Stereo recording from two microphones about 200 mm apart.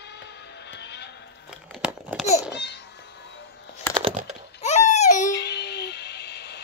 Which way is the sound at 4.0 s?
30° right (ahead or behind).